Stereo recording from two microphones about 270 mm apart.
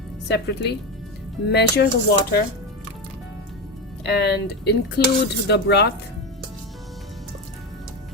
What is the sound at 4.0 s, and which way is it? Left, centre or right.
Dishes, left.